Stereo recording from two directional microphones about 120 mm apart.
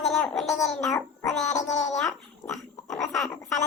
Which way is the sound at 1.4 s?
75° left (ahead or behind).